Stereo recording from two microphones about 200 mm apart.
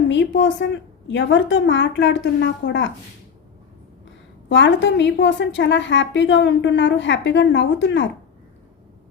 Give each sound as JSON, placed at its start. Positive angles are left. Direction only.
{"t": 0.1, "sound": "a woman's voice", "side_deg": 65}
{"t": 4.4, "sound": "a woman's voice", "side_deg": 65}